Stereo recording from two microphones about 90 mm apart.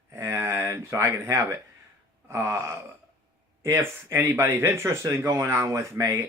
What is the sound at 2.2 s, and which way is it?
Gasp, 30° right (ahead or behind).